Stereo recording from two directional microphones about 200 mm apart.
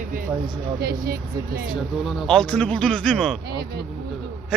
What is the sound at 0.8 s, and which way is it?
Speech, 50° right (ahead or behind).